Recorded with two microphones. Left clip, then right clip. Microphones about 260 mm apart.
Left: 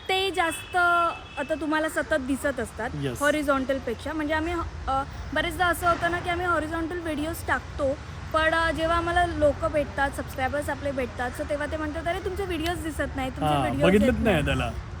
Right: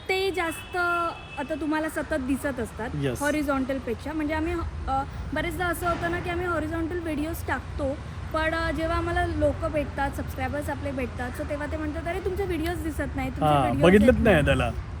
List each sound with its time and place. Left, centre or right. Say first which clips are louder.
0.1 s speech: left 2 dB; centre
13.4 s a man's voice: right 3 dB; centre